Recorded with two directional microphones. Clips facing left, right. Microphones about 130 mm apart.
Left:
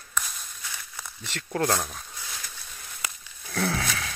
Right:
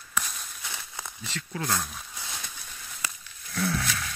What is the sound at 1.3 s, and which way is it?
Speech, 60° left (ahead or behind).